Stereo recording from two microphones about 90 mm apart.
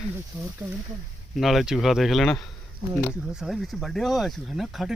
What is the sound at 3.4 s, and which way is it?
Speech, centre (ahead or behind).